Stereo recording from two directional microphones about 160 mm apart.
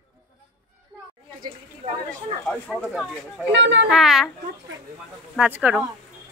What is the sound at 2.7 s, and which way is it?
Speech, centre (ahead or behind).